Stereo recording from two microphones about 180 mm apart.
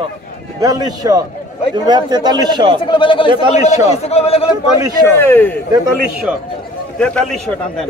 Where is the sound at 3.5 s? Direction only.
40° left (ahead or behind).